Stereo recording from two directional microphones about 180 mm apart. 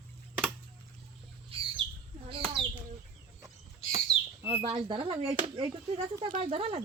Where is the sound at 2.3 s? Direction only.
30° right (ahead or behind).